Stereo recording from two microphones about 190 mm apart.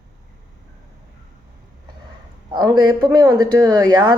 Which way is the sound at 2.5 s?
20° right (ahead or behind).